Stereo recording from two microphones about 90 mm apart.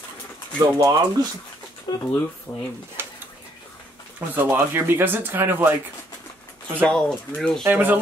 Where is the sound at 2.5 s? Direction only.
35° left (ahead or behind).